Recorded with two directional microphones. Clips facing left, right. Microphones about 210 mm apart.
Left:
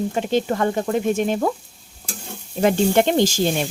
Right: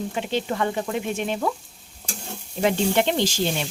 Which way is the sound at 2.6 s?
45° left (ahead or behind).